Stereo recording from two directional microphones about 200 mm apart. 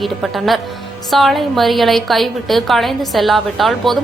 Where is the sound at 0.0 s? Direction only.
Centre (ahead or behind).